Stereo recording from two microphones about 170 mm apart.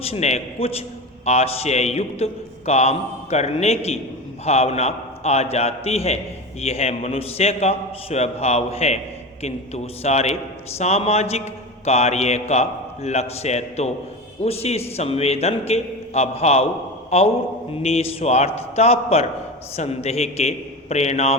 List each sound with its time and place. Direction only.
0.0 s a man's voice: 40° left (ahead or behind)